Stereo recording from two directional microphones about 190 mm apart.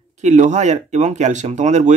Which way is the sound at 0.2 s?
40° right (ahead or behind).